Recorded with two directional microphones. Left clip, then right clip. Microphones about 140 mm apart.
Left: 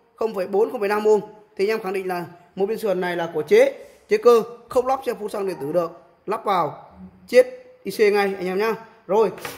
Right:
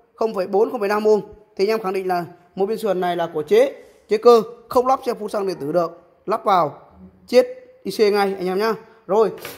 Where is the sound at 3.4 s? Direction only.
20° right (ahead or behind).